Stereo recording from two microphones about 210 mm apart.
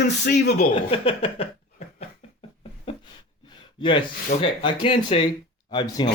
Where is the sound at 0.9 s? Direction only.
25° left (ahead or behind).